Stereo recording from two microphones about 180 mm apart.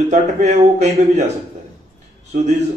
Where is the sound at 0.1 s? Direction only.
40° right (ahead or behind).